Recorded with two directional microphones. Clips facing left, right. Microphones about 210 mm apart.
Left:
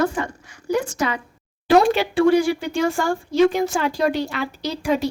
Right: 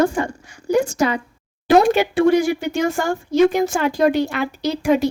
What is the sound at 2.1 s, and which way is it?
Speech, 20° right (ahead or behind).